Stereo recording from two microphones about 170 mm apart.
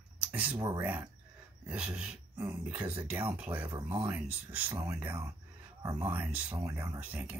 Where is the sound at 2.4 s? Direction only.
10° right (ahead or behind).